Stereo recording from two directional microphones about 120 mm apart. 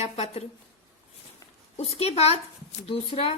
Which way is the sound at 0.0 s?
60° left (ahead or behind).